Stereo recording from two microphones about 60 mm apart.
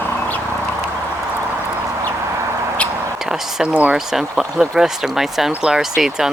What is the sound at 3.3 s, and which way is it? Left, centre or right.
Speech, centre.